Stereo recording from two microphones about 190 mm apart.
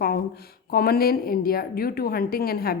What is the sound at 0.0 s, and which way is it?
Speech, 55° left (ahead or behind).